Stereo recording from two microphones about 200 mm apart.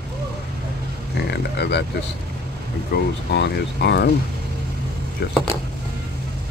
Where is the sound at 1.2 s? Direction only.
60° left (ahead or behind).